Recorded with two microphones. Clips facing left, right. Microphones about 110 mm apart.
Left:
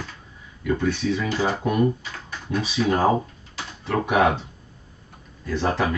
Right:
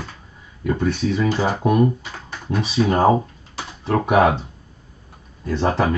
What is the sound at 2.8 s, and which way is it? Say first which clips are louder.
Speech: right 4 dB; 35° right (ahead or behind).